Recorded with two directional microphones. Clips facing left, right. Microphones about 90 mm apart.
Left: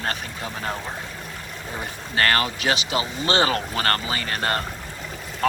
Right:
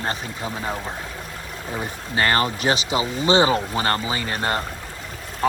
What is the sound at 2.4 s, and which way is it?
Speech, 35° right (ahead or behind).